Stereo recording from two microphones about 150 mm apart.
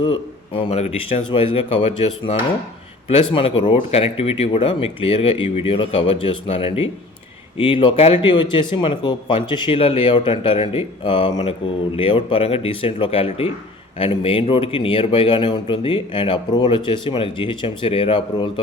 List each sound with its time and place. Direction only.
0.0 s speech: 35° left (ahead or behind)